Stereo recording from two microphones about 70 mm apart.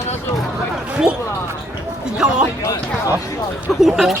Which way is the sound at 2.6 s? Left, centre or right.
Left.